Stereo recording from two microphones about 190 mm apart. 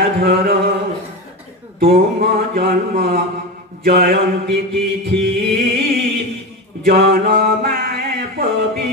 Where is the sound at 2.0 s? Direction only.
50° right (ahead or behind).